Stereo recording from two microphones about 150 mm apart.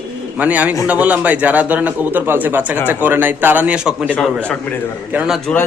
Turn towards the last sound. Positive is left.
turn(degrees=-5)  # may be behind; listen again after turning